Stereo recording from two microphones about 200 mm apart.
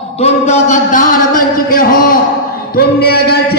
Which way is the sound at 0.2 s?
35° left (ahead or behind).